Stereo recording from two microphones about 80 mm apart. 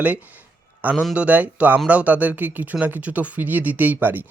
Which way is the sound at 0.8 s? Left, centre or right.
Centre.